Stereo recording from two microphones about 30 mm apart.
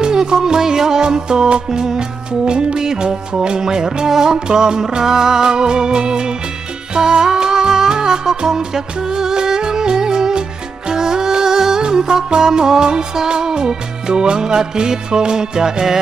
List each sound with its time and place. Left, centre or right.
0.0 s music: right